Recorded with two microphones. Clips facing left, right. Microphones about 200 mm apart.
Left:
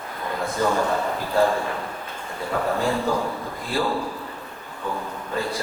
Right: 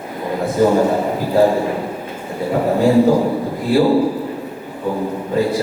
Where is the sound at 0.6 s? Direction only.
25° right (ahead or behind).